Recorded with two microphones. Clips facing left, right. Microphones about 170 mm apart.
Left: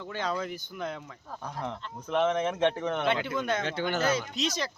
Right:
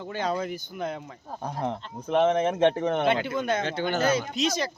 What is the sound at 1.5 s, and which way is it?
Speech, 50° right (ahead or behind).